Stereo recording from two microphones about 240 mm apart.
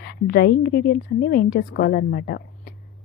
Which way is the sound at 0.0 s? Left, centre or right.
Left.